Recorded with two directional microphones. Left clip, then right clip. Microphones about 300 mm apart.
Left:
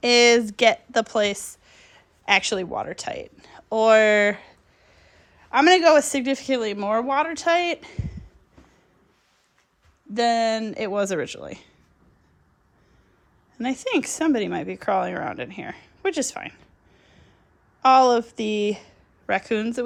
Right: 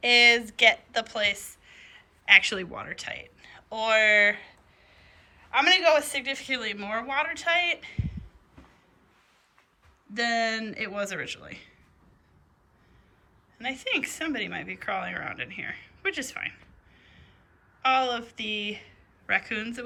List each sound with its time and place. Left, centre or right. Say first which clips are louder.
0.0 s a woman's voice: left 3 dB; left
6.1 s speech: left 6 dB; left
10.2 s speech: left 6 dB; centre
13.6 s speech: left 4 dB; centre
17.0 s snort: even; centre
17.8 s speech: left 9 dB; centre